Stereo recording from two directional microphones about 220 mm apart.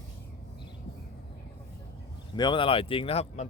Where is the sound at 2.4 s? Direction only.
20° left (ahead or behind).